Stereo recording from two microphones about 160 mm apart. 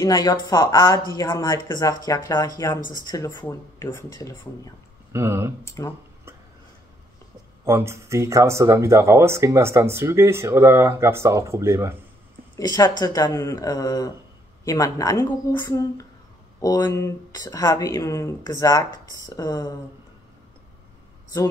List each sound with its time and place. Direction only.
0.0 s speech: 25° left (ahead or behind)
5.1 s speech: 15° right (ahead or behind)
5.7 s speech: 15° left (ahead or behind)
7.6 s speech: 15° right (ahead or behind)
12.5 s speech: 20° left (ahead or behind)